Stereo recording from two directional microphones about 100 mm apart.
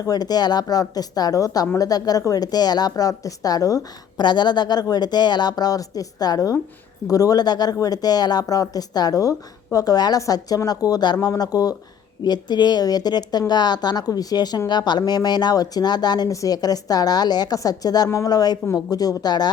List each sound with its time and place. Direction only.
0.0 s a woman's voice: 40° left (ahead or behind)